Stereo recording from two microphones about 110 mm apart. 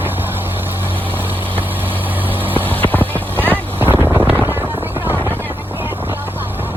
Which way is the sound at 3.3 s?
20° right (ahead or behind).